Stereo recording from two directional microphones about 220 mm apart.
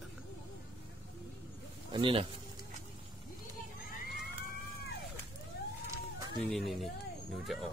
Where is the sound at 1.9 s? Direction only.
25° right (ahead or behind).